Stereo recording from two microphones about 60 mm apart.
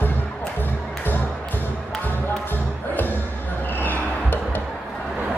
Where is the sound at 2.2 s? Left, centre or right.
Left.